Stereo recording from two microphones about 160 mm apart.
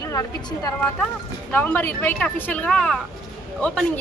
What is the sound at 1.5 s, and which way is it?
A woman's voice, 10° left (ahead or behind).